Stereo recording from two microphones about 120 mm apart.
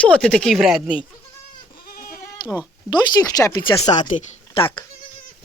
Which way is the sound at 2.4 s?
40° left (ahead or behind).